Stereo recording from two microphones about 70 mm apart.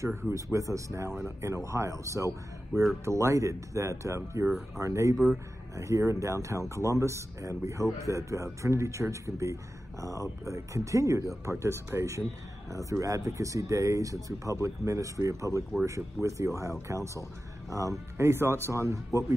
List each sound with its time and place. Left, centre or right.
0.0 s speech: right
0.3 s speech: right
5.1 s speech: centre
5.8 s speech: right